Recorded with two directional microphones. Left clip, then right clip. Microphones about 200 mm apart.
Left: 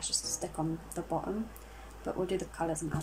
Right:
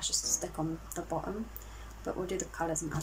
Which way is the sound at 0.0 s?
10° left (ahead or behind).